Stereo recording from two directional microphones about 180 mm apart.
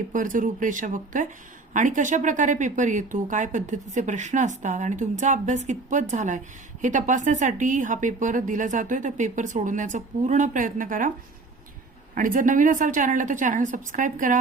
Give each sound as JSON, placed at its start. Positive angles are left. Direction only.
{"t": 0.1, "sound": "speech", "side_deg": -50}
{"t": 12.1, "sound": "speech", "side_deg": -50}